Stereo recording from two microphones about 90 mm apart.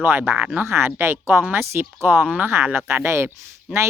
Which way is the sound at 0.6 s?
25° right (ahead or behind).